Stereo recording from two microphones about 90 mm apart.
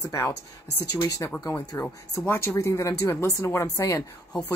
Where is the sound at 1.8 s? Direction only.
25° left (ahead or behind).